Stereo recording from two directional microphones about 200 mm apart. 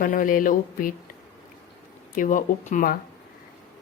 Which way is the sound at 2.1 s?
40° left (ahead or behind).